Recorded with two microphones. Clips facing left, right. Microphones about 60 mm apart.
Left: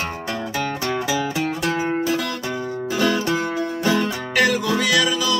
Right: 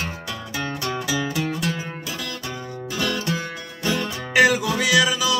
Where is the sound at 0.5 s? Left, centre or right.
Left.